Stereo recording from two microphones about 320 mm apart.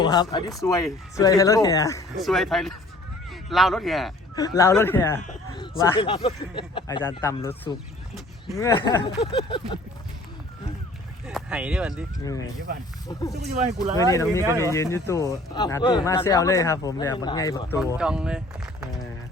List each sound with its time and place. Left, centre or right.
0.0 s speech: centre
4.4 s speech: centre
5.2 s a sound: left
5.8 s speech: centre
11.3 s speech: centre
12.7 s speech: right
13.1 s speech: centre
17.9 s speech: centre